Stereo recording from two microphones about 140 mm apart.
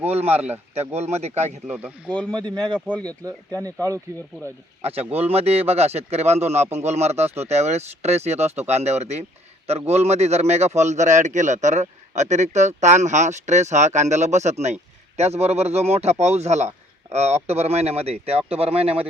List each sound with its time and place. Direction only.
0.1 s a man's voice: 45° right (ahead or behind)
1.6 s speech: 10° right (ahead or behind)
2.0 s speech: 10° left (ahead or behind)
3.2 s speech: 25° right (ahead or behind)
4.8 s a man's voice: 45° right (ahead or behind)